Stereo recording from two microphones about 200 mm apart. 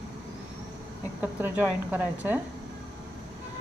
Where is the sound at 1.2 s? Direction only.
10° right (ahead or behind).